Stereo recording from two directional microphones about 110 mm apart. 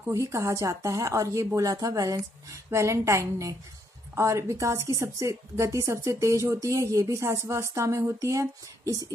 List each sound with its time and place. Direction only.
0.0 s a woman's voice: 30° right (ahead or behind)